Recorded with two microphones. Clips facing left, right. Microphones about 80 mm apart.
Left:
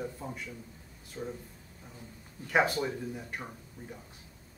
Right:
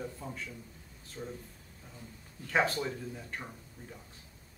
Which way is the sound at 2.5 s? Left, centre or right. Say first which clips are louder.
Left 2 dB; centre.